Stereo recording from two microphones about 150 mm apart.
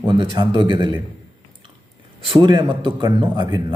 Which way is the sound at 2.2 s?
35° right (ahead or behind).